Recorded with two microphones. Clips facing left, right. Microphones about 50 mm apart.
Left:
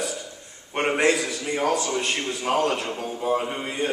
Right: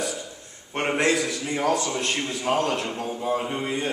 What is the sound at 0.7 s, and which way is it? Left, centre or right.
Speech, centre.